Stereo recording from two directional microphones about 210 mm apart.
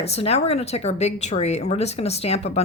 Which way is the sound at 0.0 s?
30° left (ahead or behind).